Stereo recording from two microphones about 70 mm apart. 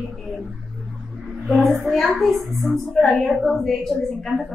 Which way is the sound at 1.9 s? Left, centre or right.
Centre.